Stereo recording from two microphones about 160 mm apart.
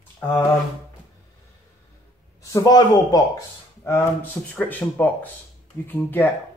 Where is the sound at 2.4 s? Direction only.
20° left (ahead or behind).